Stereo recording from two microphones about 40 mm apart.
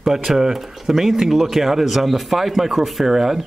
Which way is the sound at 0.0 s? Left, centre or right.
Centre.